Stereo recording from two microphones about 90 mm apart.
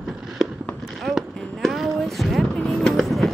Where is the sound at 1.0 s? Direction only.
Centre (ahead or behind).